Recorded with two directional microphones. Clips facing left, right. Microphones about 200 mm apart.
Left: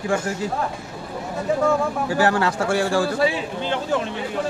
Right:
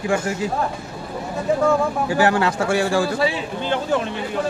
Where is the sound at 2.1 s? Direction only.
15° right (ahead or behind).